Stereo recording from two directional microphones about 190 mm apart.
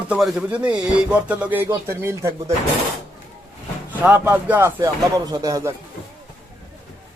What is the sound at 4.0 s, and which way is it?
Speech, 10° right (ahead or behind).